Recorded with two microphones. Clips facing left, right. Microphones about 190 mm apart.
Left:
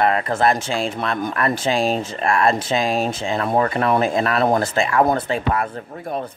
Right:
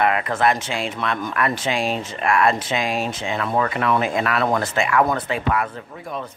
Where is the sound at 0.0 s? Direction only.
35° left (ahead or behind).